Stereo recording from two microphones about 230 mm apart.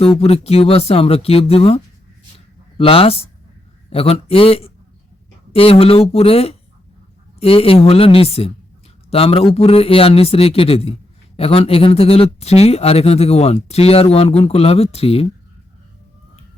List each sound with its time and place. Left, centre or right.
0.2 s speech: left